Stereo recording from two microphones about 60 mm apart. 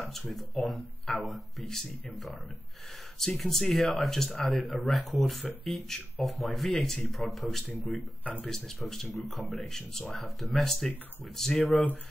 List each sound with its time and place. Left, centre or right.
0.3 s speech: centre
3.2 s speech: centre
8.2 s speech: left
8.5 s speech: centre